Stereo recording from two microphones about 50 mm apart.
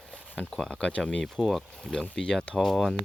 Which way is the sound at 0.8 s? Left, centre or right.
Left.